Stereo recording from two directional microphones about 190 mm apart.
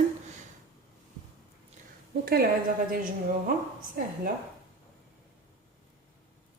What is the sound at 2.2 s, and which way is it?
Speech, 55° right (ahead or behind).